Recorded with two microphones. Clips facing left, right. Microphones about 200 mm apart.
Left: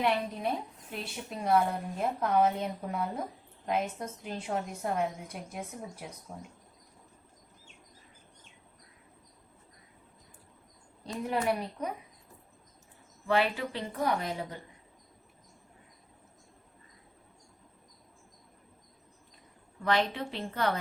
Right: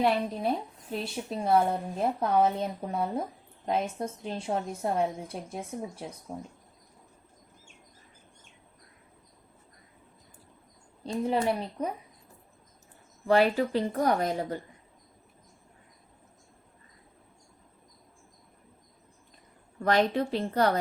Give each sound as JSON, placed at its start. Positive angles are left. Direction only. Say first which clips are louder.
{"t": 0.9, "sound": "a woman's voice", "louder": "right 8 dB", "side_deg": -30}
{"t": 11.0, "sound": "a woman's voice", "louder": "right 4 dB", "side_deg": -30}
{"t": 13.2, "sound": "a woman's voice", "louder": "right 6 dB", "side_deg": -40}
{"t": 19.8, "sound": "a woman's voice", "louder": "right 4 dB", "side_deg": -45}